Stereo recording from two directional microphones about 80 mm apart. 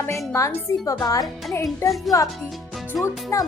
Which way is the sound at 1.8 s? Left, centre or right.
Left.